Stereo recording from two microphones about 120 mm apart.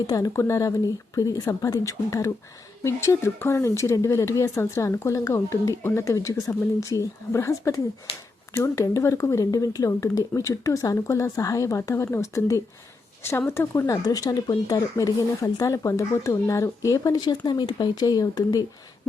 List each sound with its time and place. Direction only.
0.1 s speech: 25° left (ahead or behind)